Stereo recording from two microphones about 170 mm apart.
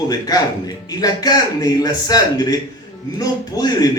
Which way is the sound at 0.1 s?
20° left (ahead or behind).